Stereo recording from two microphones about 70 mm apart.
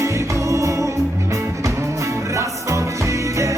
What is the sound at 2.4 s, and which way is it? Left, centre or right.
Music, right.